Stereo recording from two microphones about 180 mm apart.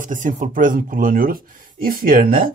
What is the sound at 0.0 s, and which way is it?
Speech, 45° right (ahead or behind).